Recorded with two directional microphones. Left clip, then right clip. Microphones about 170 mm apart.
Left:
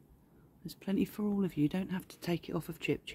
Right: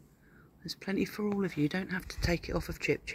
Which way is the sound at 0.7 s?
45° left (ahead or behind).